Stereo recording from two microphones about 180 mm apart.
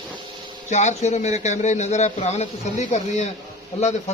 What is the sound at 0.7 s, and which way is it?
A man's voice, 40° left (ahead or behind).